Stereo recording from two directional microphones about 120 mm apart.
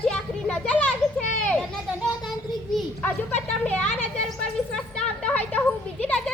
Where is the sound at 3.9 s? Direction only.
Centre (ahead or behind).